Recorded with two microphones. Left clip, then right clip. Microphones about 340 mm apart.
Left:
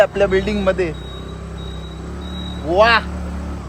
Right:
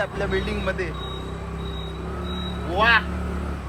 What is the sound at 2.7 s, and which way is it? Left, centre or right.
Speech, left.